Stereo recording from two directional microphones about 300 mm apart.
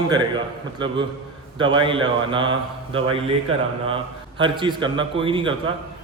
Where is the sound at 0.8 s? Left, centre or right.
Centre.